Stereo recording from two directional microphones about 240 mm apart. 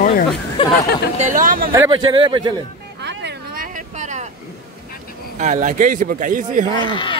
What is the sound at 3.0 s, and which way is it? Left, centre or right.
Boat, right.